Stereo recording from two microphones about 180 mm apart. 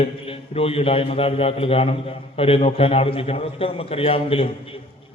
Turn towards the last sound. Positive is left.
turn(degrees=30)  # may be behind; listen again after turning